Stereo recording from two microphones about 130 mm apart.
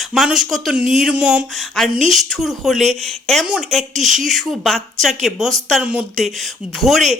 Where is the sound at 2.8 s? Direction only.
60° right (ahead or behind).